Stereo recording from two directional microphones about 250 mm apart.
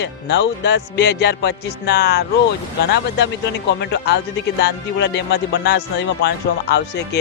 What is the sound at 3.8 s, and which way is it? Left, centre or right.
Speech, left.